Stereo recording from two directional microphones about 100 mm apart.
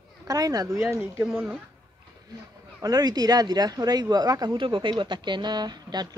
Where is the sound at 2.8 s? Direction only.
40° right (ahead or behind).